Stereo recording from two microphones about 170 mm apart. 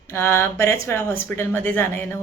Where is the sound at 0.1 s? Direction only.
15° left (ahead or behind).